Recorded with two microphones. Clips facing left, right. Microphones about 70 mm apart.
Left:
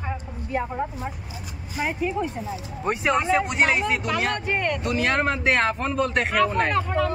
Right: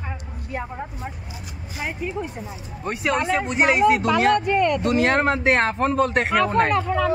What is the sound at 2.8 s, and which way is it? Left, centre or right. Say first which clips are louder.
Speech: left 2 dB; left.